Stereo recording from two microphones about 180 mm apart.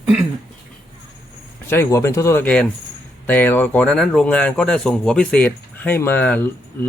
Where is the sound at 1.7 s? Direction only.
15° left (ahead or behind).